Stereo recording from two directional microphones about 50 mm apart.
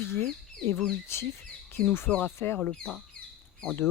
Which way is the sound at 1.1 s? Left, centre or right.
Left.